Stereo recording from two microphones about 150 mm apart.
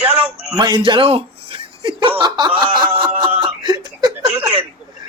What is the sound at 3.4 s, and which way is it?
Chuckle, 30° right (ahead or behind).